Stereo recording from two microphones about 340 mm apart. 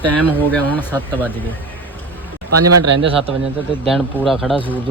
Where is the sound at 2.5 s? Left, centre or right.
Right.